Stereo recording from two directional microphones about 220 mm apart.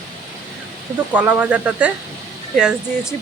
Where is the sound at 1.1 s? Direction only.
5° right (ahead or behind).